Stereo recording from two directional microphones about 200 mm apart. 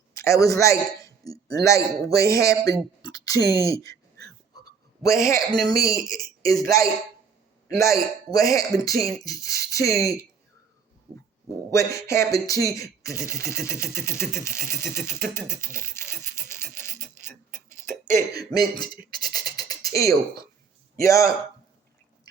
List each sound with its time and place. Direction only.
0.3 s a man's voice: 15° left (ahead or behind)
5.1 s a man's voice: 15° left (ahead or behind)
11.7 s a man's voice: 15° left (ahead or behind)
15.8 s scratch: 15° left (ahead or behind)
17.2 s tick-tock: 15° left (ahead or behind)
18.3 s a man's voice: 20° left (ahead or behind)